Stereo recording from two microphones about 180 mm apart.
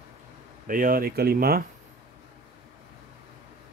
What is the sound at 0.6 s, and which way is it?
Speech, 50° right (ahead or behind).